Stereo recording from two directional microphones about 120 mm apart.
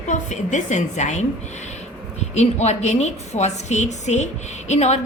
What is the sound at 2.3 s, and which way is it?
A woman's voice, 65° left (ahead or behind).